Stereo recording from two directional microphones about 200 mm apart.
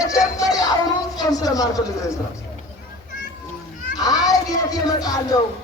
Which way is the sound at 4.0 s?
20° left (ahead or behind).